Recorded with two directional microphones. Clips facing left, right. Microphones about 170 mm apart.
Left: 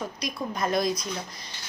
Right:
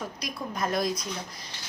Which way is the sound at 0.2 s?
Centre (ahead or behind).